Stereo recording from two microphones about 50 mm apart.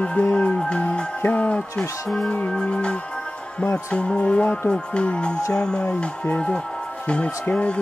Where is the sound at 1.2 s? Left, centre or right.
Left.